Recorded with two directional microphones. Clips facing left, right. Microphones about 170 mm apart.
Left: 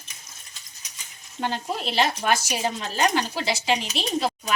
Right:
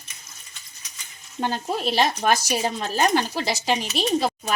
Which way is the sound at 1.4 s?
40° right (ahead or behind).